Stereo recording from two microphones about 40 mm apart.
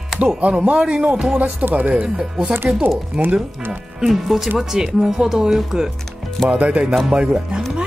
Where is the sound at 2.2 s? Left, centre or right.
Centre.